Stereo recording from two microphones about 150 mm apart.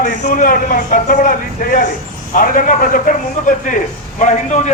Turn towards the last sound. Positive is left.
turn(degrees=55)  # may be behind; listen again after turning